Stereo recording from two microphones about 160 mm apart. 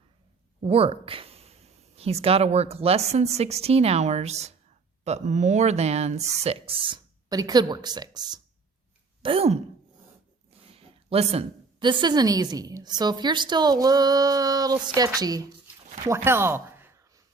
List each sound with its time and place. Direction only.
0.6 s speech: 35° right (ahead or behind)
9.2 s speech: 35° right (ahead or behind)
10.7 s a woman's voice: 35° right (ahead or behind)
16.0 s a sound: 15° right (ahead or behind)